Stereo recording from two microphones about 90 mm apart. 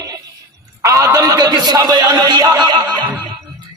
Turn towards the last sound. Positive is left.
turn(degrees=-55)  # may be behind; listen again after turning